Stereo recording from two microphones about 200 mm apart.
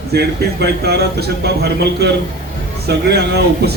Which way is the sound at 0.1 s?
55° right (ahead or behind).